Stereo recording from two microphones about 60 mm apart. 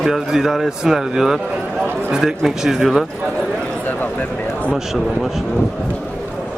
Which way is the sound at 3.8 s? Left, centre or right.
Left.